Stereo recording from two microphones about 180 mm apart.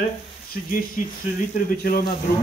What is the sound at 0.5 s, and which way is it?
Speech, 50° left (ahead or behind).